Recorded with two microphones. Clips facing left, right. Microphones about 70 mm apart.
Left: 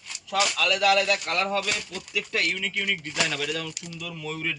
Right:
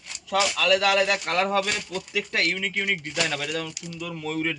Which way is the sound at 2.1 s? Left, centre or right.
Right.